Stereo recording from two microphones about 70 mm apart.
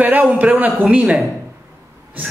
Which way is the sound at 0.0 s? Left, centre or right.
Right.